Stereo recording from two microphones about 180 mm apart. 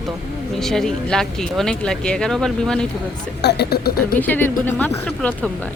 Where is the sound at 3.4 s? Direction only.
65° left (ahead or behind).